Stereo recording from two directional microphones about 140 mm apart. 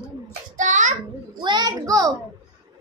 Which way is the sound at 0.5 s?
65° right (ahead or behind).